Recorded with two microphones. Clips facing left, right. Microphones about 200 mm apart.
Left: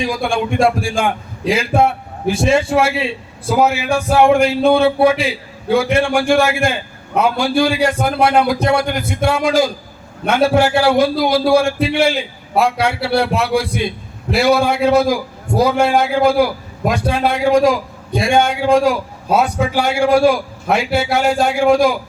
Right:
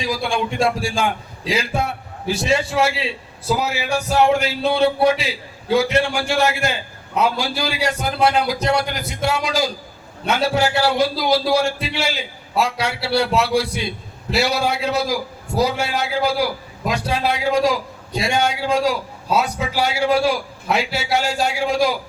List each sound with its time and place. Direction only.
0.0 s a man's voice: 55° left (ahead or behind)